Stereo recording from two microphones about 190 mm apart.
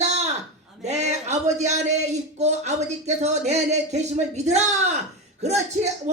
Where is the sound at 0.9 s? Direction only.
35° right (ahead or behind).